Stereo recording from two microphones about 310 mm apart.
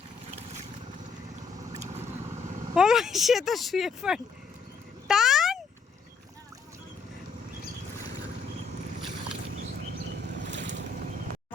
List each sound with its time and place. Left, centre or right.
1.7 s vehicle: centre
2.7 s speech: centre
5.0 s a sound: centre
10.4 s boat: right